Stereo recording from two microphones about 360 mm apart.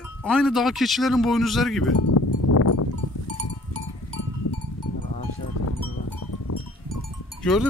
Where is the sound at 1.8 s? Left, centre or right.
Left.